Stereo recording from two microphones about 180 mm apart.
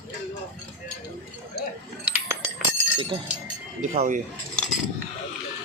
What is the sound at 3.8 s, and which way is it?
Speech, 45° right (ahead or behind).